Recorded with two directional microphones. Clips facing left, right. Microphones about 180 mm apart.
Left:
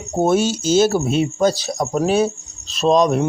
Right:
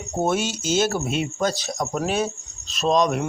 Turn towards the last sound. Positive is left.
turn(degrees=35)  # may be behind; listen again after turning